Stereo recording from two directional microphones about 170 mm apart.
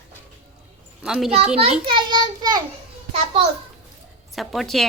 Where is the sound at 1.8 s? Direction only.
25° right (ahead or behind).